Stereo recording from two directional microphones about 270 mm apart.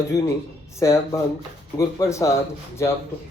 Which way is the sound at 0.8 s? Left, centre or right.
Centre.